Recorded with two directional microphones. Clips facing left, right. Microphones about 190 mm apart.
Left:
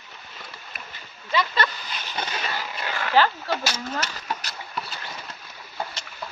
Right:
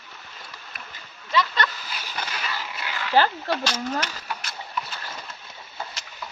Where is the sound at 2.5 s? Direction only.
45° left (ahead or behind).